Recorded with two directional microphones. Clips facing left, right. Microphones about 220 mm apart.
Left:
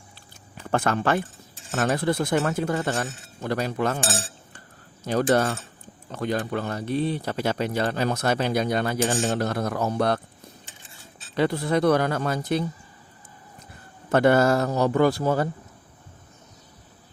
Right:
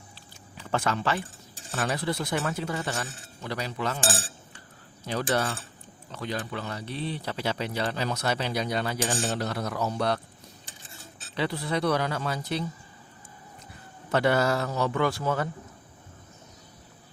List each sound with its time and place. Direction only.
0.5 s speech: 50° left (ahead or behind)
5.0 s speech: 45° left (ahead or behind)
11.3 s speech: 50° left (ahead or behind)
14.1 s speech: 50° left (ahead or behind)